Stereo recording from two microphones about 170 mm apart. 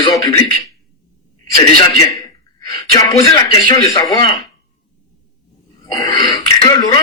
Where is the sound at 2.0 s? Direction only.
20° left (ahead or behind).